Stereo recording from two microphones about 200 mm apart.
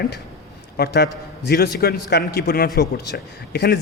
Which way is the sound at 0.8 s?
55° left (ahead or behind).